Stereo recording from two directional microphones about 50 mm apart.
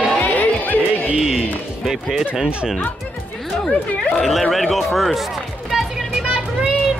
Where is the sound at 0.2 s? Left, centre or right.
Left.